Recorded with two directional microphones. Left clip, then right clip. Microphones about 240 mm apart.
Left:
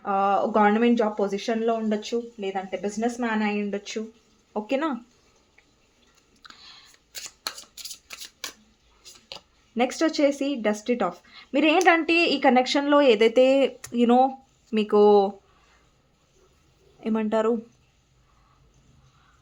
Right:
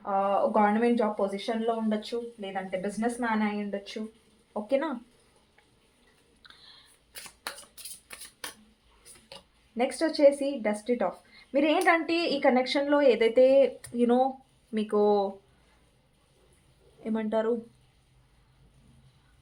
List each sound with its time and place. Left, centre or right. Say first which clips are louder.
0.0 s a woman's voice: left 3 dB; left
7.1 s scissors: left 6 dB; left
8.0 s a sound: left 5 dB; left
9.7 s a woman's voice: left 4 dB; left
17.0 s a woman's voice: left 5 dB; left